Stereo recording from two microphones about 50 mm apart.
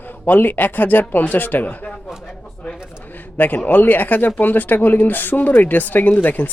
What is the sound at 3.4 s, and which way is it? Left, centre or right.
Speech, left.